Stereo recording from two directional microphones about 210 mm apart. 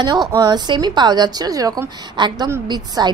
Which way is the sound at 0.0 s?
20° right (ahead or behind).